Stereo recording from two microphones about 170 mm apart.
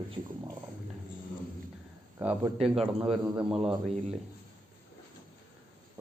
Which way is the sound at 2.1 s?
15° right (ahead or behind).